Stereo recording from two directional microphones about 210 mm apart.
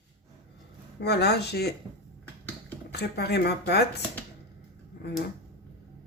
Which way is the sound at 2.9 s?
50° left (ahead or behind).